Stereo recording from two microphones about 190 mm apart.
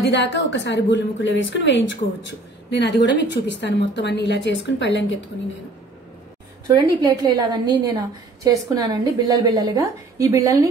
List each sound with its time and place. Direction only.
0.0 s a woman's voice: 70° left (ahead or behind)
6.7 s a woman's voice: 20° right (ahead or behind)